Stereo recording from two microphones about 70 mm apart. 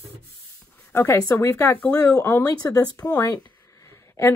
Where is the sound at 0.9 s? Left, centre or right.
Left.